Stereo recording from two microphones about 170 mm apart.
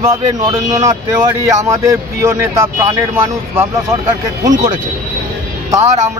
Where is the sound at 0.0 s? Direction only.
20° right (ahead or behind).